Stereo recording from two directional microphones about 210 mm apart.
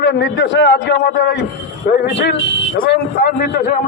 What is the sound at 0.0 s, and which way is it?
A man's voice, 55° left (ahead or behind).